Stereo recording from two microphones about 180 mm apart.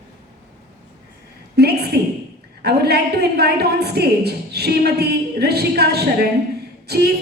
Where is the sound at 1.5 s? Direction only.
60° right (ahead or behind).